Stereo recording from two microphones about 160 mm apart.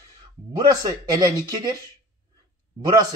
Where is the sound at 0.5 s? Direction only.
25° right (ahead or behind).